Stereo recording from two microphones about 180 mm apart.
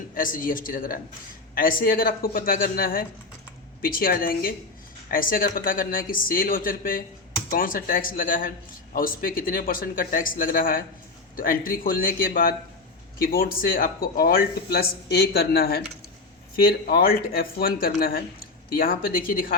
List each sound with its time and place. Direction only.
0.1 s a man's voice: 50° left (ahead or behind)